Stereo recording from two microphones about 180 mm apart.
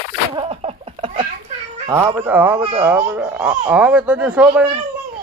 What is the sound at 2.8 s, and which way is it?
A man's voice, 10° right (ahead or behind).